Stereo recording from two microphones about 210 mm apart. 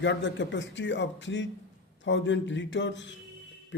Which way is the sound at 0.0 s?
60° left (ahead or behind).